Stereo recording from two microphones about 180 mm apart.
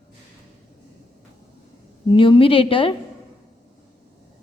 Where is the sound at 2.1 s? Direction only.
30° left (ahead or behind).